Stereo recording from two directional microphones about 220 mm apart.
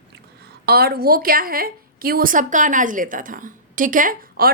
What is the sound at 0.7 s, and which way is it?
A woman's voice, 45° right (ahead or behind).